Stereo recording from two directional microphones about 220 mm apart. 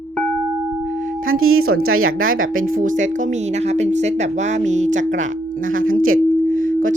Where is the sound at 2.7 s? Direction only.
35° right (ahead or behind).